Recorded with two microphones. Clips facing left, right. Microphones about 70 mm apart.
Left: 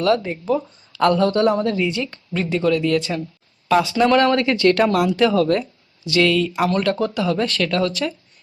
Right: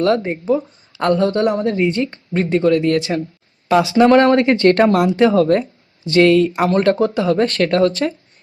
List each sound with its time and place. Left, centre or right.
0.0 s speech: right